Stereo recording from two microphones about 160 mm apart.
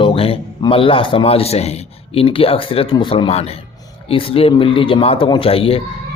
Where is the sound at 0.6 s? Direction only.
35° left (ahead or behind).